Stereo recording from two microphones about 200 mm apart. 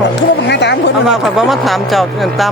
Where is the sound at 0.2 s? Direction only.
60° left (ahead or behind).